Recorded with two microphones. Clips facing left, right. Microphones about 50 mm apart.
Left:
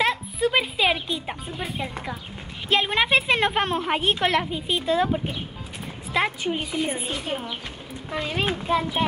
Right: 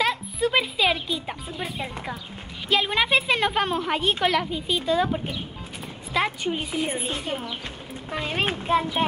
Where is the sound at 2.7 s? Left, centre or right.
Centre.